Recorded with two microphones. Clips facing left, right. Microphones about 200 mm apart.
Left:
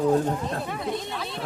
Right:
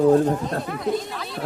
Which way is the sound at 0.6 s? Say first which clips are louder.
Right 5 dB; centre (ahead or behind).